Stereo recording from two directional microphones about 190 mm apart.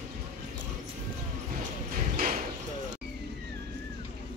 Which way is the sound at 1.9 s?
45° right (ahead or behind).